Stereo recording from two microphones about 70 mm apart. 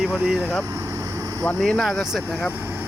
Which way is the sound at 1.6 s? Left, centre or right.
Centre.